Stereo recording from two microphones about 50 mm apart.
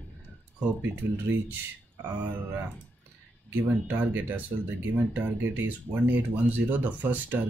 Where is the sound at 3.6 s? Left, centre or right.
Right.